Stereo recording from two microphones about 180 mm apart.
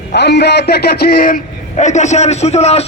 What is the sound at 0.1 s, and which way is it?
A man's voice, 70° left (ahead or behind).